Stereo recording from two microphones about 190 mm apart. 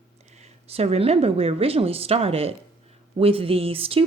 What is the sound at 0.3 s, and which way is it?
Speech, 35° right (ahead or behind).